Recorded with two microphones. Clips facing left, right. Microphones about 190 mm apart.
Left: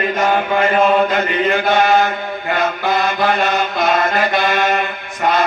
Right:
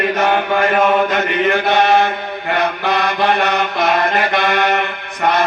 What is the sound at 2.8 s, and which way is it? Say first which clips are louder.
Mantra: even; 65° right (ahead or behind).